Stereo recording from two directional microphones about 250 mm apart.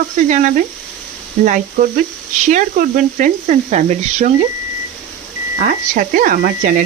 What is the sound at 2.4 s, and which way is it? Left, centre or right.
Speech, right.